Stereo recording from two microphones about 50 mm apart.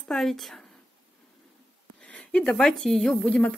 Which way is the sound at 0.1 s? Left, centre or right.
Centre.